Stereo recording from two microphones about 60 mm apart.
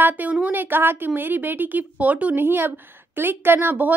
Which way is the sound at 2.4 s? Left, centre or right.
Right.